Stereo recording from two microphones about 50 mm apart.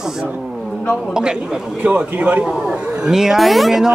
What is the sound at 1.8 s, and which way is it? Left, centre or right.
Speech, right.